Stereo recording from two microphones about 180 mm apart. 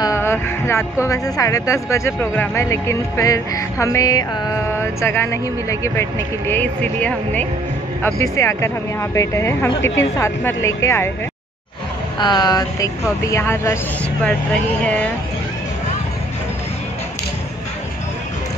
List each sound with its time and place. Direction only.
0.0 s a woman's voice: 15° left (ahead or behind)
12.2 s speech: 25° left (ahead or behind)